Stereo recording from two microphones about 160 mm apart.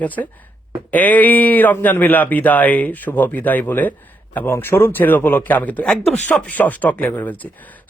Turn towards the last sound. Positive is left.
turn(degrees=10)  # may be behind; listen again after turning